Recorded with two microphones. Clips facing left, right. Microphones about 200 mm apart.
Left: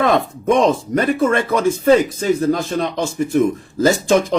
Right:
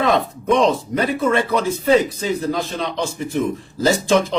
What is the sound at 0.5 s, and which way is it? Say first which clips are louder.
Speech: left 1 dB; 50° left (ahead or behind).